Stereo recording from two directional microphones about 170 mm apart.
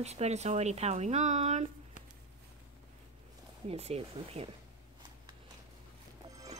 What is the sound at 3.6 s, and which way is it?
Speech, 35° right (ahead or behind).